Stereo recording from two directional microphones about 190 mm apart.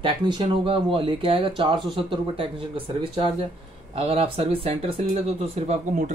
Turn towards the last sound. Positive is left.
turn(degrees=-35)  # may be behind; listen again after turning